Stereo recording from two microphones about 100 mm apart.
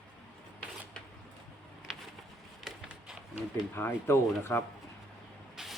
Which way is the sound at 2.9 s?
15° right (ahead or behind).